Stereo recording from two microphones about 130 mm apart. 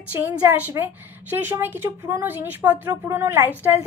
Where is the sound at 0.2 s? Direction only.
15° right (ahead or behind).